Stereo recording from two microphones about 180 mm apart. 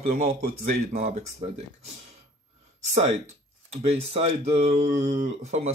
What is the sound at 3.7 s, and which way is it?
Speech, 35° right (ahead or behind).